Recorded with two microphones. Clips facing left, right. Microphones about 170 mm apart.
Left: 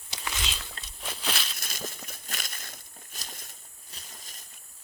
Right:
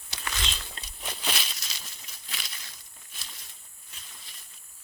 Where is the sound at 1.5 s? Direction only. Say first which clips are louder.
Left 9 dB; 50° left (ahead or behind).